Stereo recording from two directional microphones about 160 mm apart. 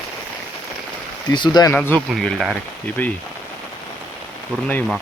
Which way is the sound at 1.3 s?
25° left (ahead or behind).